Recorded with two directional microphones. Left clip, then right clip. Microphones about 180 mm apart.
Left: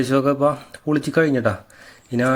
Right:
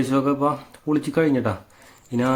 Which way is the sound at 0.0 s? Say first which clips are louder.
Left 3 dB; 15° left (ahead or behind).